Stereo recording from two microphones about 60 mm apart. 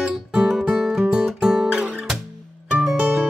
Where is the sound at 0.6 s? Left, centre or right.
Centre.